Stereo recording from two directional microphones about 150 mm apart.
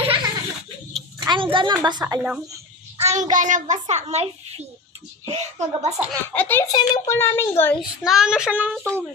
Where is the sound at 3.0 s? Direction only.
45° right (ahead or behind).